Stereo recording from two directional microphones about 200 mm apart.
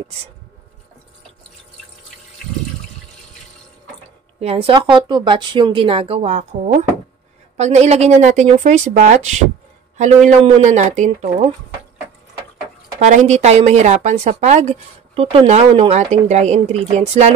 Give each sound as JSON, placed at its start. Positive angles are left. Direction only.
{"t": 4.4, "sound": "a woman's voice", "side_deg": -30}
{"t": 10.4, "sound": "a woman's voice", "side_deg": -35}
{"t": 13.0, "sound": "a woman's voice", "side_deg": -35}